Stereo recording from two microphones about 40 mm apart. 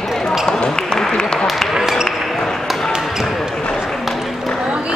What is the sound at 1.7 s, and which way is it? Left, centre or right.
Basketball bounce, centre.